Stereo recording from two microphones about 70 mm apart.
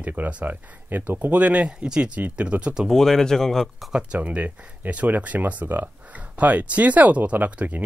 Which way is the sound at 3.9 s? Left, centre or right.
Centre.